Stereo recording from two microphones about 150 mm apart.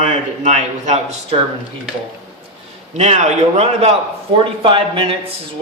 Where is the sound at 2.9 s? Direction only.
50° right (ahead or behind).